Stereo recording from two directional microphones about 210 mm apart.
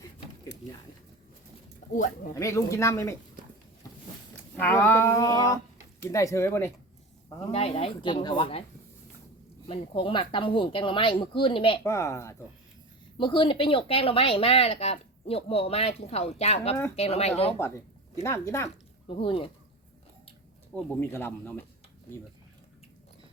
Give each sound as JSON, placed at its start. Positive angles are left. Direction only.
{"t": 0.5, "sound": "a sound", "side_deg": 55}
{"t": 2.3, "sound": "speech", "side_deg": 15}
{"t": 3.8, "sound": "a sound", "side_deg": 15}
{"t": 4.5, "sound": "speech", "side_deg": 10}
{"t": 7.5, "sound": "speech", "side_deg": 30}
{"t": 9.6, "sound": "speech", "side_deg": 25}
{"t": 11.8, "sound": "speech", "side_deg": 15}
{"t": 17.6, "sound": "speech", "side_deg": 10}
{"t": 19.0, "sound": "speech", "side_deg": 25}
{"t": 20.7, "sound": "speech", "side_deg": 10}